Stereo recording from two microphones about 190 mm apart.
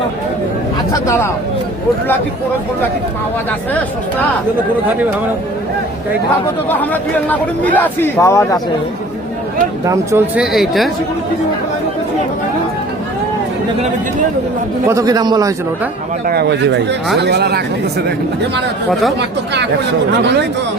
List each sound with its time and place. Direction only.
0.9 s a man's voice: 15° left (ahead or behind)
6.7 s a man's voice: 10° left (ahead or behind)
9.8 s speech: 15° right (ahead or behind); by 10.9 s centre (ahead or behind)
14.8 s a man's voice: 20° right (ahead or behind)
16.2 s speech: 55° right (ahead or behind)